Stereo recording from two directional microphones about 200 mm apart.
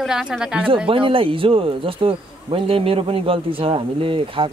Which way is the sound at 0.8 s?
25° right (ahead or behind).